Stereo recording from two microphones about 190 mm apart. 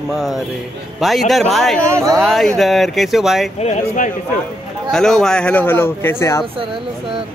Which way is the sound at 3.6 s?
40° left (ahead or behind).